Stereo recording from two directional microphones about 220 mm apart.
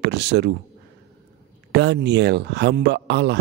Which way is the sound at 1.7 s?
50° right (ahead or behind).